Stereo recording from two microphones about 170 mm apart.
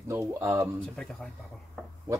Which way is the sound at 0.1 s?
15° right (ahead or behind).